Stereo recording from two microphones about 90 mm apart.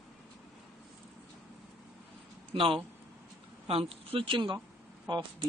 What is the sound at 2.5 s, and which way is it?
Speech, 90° right.